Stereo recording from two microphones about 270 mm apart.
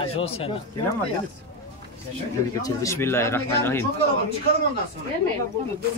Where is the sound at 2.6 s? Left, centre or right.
Centre.